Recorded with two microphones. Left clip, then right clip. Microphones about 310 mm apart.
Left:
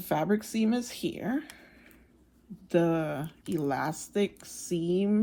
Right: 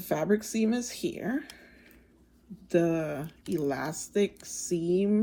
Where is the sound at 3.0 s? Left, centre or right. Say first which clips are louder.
Even; left.